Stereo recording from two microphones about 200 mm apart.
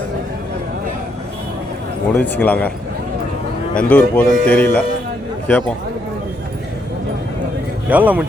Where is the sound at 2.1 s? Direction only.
10° left (ahead or behind).